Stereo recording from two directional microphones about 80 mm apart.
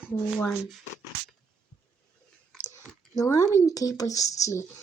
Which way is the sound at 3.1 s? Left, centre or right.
Left.